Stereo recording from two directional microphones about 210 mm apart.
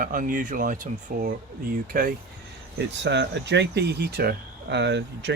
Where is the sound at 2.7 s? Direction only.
55° right (ahead or behind).